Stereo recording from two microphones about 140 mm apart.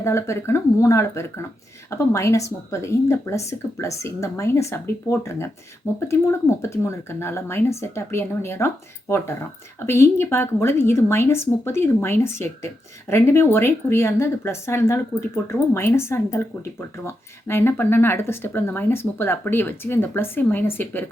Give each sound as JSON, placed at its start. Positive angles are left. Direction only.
{"t": 0.0, "sound": "speech", "side_deg": 20}